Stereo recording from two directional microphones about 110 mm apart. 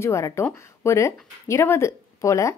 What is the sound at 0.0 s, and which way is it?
Speech, 25° left (ahead or behind).